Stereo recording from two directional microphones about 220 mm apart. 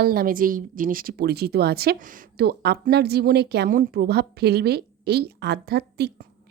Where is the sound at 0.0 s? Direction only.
40° right (ahead or behind).